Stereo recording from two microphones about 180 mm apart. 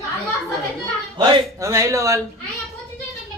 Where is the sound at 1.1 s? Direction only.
20° right (ahead or behind).